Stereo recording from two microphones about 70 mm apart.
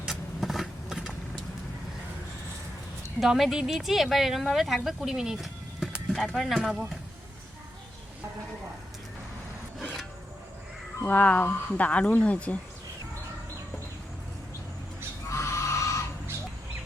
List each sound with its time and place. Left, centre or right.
0.1 s vehicle: centre
3.2 s speech: centre
6.1 s speech: centre
6.6 s speech: centre
9.8 s a sound: centre
11.0 s speech: left
15.3 s a sound: left